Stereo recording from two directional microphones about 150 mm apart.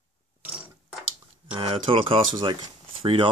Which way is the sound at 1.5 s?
35° right (ahead or behind).